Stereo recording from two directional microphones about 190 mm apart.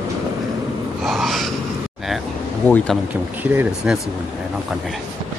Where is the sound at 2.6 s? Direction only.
5° left (ahead or behind).